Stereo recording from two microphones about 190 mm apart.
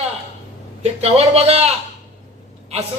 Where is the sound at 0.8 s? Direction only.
35° right (ahead or behind).